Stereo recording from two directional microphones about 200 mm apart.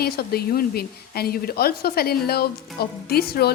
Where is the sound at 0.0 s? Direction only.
50° left (ahead or behind).